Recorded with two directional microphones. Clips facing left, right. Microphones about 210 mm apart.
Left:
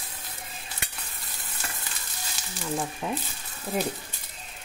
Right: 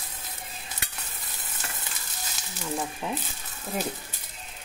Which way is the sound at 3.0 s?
Centre (ahead or behind).